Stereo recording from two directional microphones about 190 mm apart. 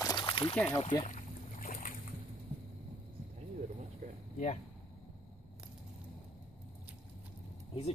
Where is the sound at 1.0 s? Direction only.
40° left (ahead or behind).